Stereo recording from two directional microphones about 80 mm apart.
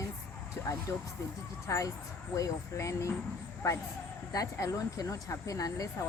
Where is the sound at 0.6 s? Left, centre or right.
Left.